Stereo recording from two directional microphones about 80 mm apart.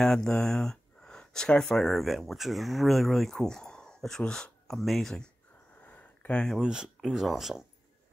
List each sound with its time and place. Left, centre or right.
0.0 s speech: centre
5.9 s a sound: centre
6.6 s speech: centre